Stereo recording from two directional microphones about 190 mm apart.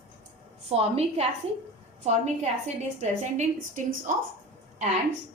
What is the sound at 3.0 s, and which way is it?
Speech, 40° right (ahead or behind).